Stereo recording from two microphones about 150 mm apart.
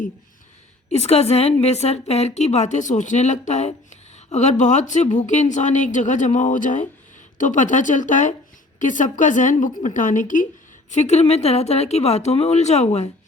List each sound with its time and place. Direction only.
0.9 s a woman's voice: 45° left (ahead or behind)